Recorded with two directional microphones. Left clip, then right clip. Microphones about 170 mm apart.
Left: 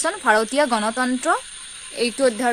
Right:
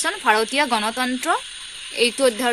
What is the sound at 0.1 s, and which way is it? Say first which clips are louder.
Speech: even; 35° left (ahead or behind).